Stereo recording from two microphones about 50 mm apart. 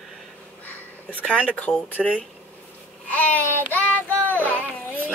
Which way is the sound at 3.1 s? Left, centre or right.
Left.